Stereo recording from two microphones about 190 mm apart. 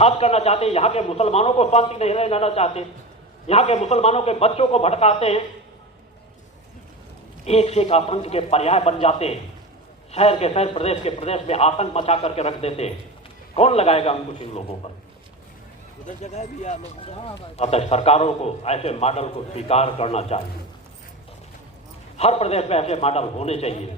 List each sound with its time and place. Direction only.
0.0 s speech: 35° left (ahead or behind)
7.4 s speech: 35° left (ahead or behind)
16.0 s speech: 35° left (ahead or behind)
22.2 s speech: 35° left (ahead or behind)